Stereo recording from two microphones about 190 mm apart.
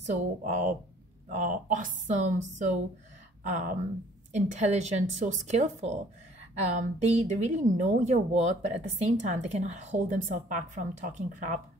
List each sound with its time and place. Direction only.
0.0 s a woman's voice: 40° right (ahead or behind)